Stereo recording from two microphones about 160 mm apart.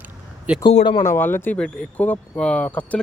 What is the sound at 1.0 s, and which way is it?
Speech, 15° left (ahead or behind).